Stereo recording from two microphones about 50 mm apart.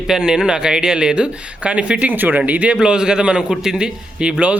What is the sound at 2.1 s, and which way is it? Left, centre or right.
Speech, right.